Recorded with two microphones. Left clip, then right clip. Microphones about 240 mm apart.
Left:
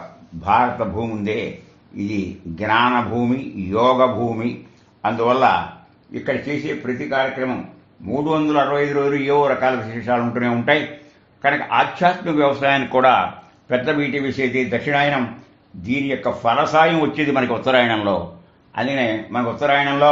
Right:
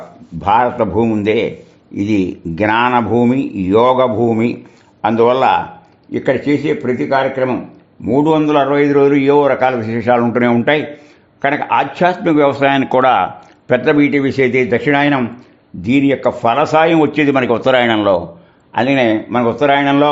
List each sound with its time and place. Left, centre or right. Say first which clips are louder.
0.4 s a man's voice: right 5 dB; right
2.6 s a man's voice: right 4 dB; right
6.8 s a man's voice: right 2 dB; right